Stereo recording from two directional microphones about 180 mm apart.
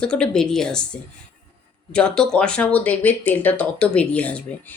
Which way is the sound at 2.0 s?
5° left (ahead or behind).